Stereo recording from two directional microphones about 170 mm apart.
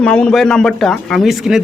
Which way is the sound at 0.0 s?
5° left (ahead or behind).